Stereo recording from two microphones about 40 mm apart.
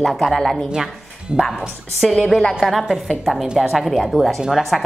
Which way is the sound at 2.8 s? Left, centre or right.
Centre.